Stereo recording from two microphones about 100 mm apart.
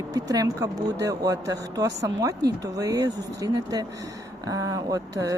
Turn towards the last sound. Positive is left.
turn(degrees=-35)  # may be behind; listen again after turning